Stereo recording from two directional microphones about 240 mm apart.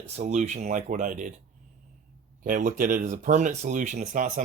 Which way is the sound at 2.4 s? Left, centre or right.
Right.